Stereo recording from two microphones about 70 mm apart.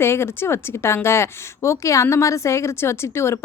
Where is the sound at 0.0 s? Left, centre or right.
Left.